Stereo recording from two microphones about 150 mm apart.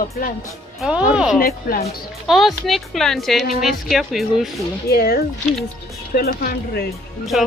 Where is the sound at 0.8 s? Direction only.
5° right (ahead or behind).